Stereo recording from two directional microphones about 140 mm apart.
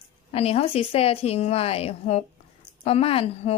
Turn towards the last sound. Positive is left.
turn(degrees=45)  # may be behind; listen again after turning